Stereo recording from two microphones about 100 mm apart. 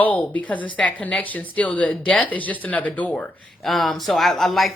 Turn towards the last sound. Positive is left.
turn(degrees=0)  # may be behind; listen again after turning